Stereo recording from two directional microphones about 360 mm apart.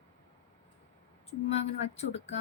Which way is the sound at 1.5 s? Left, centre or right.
Centre.